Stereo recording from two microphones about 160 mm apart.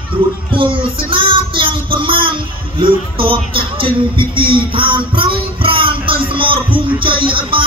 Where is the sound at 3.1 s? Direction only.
35° right (ahead or behind).